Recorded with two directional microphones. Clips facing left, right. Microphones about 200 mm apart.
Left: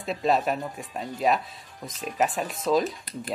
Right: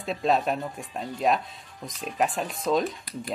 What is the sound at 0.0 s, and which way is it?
Speech, centre (ahead or behind).